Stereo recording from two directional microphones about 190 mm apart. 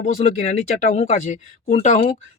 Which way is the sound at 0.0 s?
35° left (ahead or behind).